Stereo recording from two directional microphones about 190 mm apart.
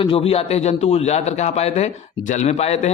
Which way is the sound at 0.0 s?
30° left (ahead or behind).